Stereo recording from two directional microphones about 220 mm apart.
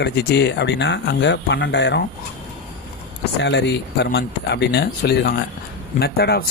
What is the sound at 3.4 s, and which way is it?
Speech, 50° left (ahead or behind).